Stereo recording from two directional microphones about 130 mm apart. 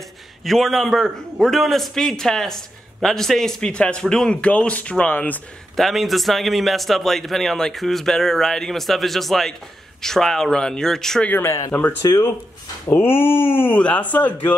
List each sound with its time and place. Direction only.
0.4 s a man's voice: centre (ahead or behind)
5.8 s a man's voice: centre (ahead or behind)